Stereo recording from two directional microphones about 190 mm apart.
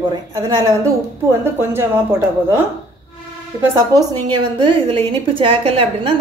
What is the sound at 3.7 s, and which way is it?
A woman's voice, 20° right (ahead or behind).